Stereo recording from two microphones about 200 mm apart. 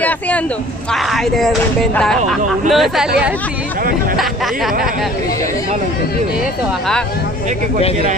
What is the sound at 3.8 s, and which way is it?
Speech, 45° right (ahead or behind).